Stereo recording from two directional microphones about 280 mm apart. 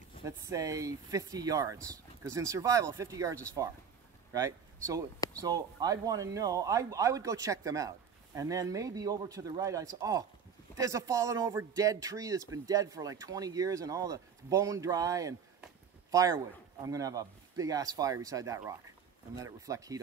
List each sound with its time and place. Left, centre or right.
0.2 s speech: centre